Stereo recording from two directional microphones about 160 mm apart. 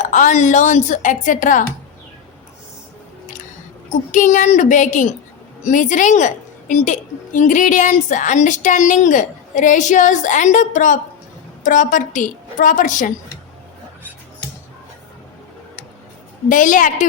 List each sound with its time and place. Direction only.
0.0 s a woman's voice: 50° left (ahead or behind)
4.1 s a woman's voice: 50° left (ahead or behind)
16.5 s a woman's voice: 55° left (ahead or behind)